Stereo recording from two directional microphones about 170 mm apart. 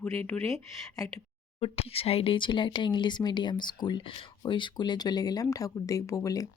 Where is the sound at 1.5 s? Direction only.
35° left (ahead or behind); by 6.5 s 20° left (ahead or behind).